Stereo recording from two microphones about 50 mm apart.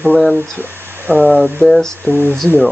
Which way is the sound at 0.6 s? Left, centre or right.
Right.